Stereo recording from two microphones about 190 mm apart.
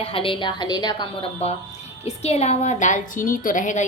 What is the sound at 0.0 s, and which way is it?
A woman's voice, 30° left (ahead or behind).